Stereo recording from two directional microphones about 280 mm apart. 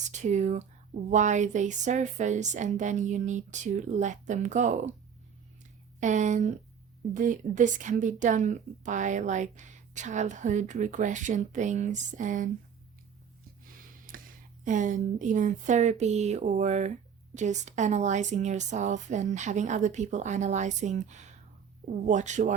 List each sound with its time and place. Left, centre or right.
0.1 s a woman's voice: right
6.0 s a woman's voice: right
14.1 s a sound: right
14.6 s a woman's voice: right